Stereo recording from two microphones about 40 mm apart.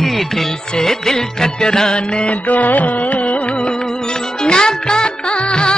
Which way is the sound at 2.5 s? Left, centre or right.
Left.